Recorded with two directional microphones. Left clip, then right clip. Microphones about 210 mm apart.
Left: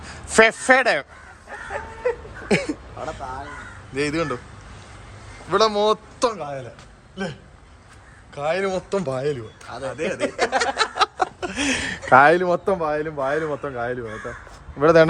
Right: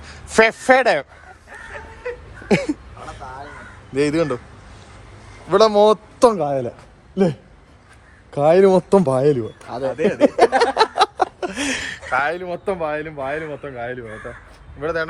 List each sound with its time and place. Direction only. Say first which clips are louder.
0.0 s speech: even; 10° left (ahead or behind)
2.5 s a sound: right 3 dB; centre (ahead or behind)
3.9 s a man's voice: right 5 dB; centre (ahead or behind)
5.5 s a man's voice: right 5 dB; centre (ahead or behind)
6.3 s speech: right 10 dB; 15° right (ahead or behind)
8.3 s speech: right 10 dB; 10° right (ahead or behind)
9.6 s a man's voice: right 5 dB; 25° right (ahead or behind)
10.2 s speech: right 8 dB; 10° right (ahead or behind)
10.8 s snicker: right 4 dB; centre (ahead or behind)
12.0 s a man's voice: left 8 dB; 50° left (ahead or behind)
12.6 s a man's voice: left 1 dB; centre (ahead or behind)
14.8 s speech: left 9 dB; 40° left (ahead or behind)